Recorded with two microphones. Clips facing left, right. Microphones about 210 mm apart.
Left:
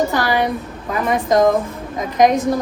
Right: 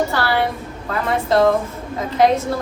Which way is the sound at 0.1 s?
15° left (ahead or behind).